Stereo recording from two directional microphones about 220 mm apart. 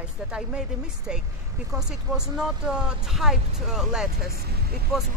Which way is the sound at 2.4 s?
5° right (ahead or behind).